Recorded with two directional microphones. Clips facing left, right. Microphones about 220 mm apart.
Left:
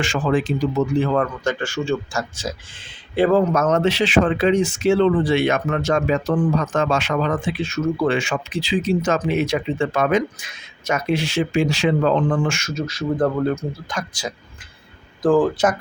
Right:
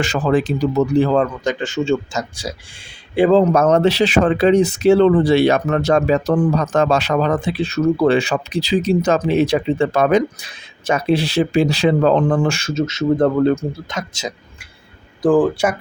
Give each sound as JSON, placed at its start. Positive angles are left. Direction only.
{"t": 0.0, "sound": "speech", "side_deg": -40}
{"t": 3.4, "sound": "speech", "side_deg": -35}